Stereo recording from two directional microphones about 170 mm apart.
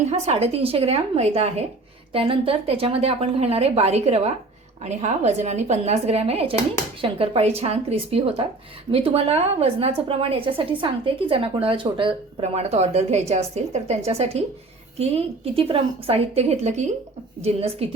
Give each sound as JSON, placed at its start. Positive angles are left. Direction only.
{"t": 0.0, "sound": "a woman's voice", "side_deg": -40}